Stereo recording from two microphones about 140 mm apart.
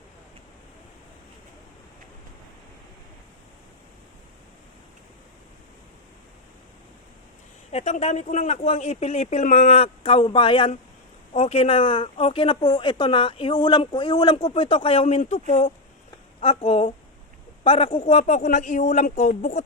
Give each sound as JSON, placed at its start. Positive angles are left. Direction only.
{"t": 7.7, "sound": "a man's voice", "side_deg": 55}